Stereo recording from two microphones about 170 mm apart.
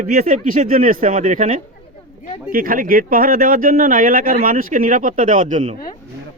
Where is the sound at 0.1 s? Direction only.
50° right (ahead or behind).